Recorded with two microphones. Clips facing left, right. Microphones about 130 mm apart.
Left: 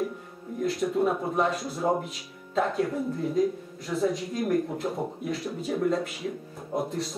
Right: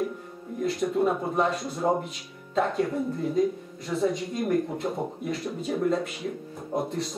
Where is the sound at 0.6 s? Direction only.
Centre (ahead or behind).